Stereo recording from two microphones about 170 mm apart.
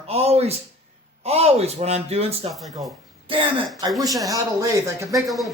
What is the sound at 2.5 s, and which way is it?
Speech, centre (ahead or behind).